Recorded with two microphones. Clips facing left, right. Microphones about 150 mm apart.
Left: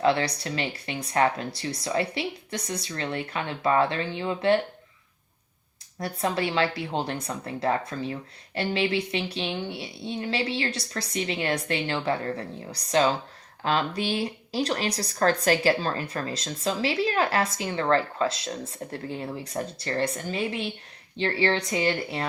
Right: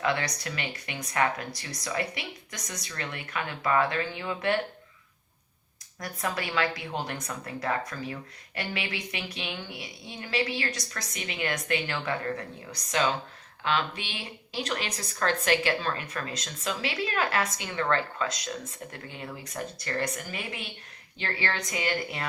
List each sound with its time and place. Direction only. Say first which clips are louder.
0.0 s speech: left 6 dB; 30° left (ahead or behind)
6.0 s speech: left 6 dB; 30° left (ahead or behind)